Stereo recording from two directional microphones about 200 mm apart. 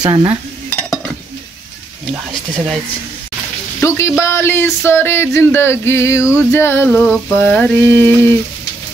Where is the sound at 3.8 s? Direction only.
15° left (ahead or behind).